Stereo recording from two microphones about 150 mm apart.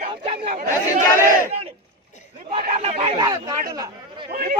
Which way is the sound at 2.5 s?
45° right (ahead or behind).